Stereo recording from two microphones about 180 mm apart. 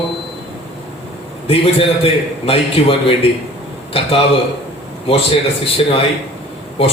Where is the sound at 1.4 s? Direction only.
30° left (ahead or behind).